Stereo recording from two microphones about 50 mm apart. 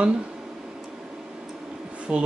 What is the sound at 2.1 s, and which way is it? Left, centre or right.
Speech, right.